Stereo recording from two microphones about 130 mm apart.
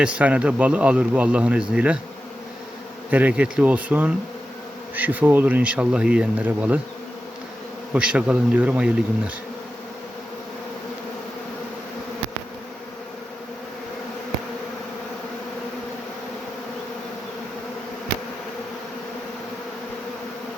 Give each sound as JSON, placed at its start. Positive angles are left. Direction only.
{"t": 0.0, "sound": "speech", "side_deg": -10}
{"t": 3.1, "sound": "speech", "side_deg": -10}
{"t": 7.9, "sound": "speech", "side_deg": -10}